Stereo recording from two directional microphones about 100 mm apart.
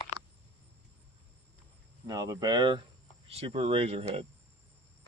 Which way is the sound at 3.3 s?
90° right.